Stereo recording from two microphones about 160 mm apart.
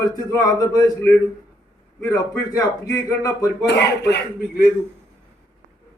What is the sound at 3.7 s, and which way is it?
Speech, 90° left.